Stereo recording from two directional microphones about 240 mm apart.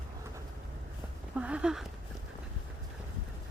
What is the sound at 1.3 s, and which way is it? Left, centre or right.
Speech, centre.